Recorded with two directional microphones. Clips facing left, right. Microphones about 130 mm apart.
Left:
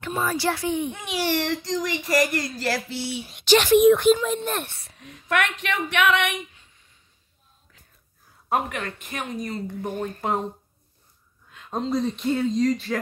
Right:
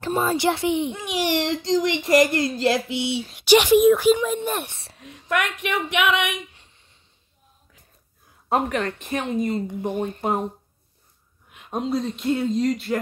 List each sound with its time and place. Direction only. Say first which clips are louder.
0.0 s speech: right 4 dB; 30° right (ahead or behind)
5.0 s speech: even; centre (ahead or behind)
5.9 s speech: left 1 dB; 15° right (ahead or behind)
8.5 s speech: right 3 dB; 30° right (ahead or behind)
11.5 s speech: right 1 dB; 10° right (ahead or behind)